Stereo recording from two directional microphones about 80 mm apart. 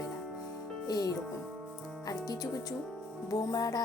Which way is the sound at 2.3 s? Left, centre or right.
Left.